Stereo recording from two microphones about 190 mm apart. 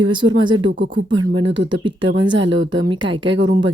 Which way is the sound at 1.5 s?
75° right (ahead or behind).